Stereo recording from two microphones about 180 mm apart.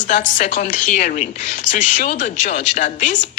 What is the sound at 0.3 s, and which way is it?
A woman's voice, 40° left (ahead or behind).